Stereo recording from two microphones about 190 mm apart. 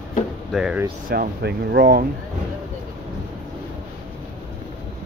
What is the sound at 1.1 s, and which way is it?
Speech, 55° right (ahead or behind).